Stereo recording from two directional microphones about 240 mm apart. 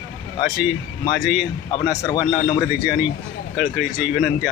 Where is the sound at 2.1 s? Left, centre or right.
Centre.